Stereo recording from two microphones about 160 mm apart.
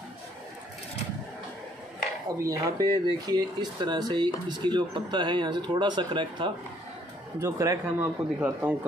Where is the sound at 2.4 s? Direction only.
20° right (ahead or behind).